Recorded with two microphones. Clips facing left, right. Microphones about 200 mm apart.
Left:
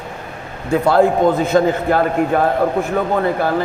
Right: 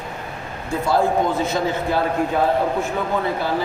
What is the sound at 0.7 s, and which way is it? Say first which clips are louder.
A man's voice: left 6 dB; 60° left (ahead or behind).